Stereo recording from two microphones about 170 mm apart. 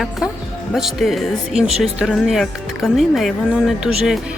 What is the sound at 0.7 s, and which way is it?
Speech, centre (ahead or behind).